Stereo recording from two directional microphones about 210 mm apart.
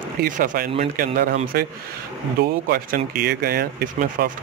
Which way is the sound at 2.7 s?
45° right (ahead or behind).